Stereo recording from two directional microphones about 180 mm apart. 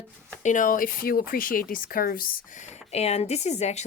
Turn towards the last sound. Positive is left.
turn(degrees=40)  # may be behind; listen again after turning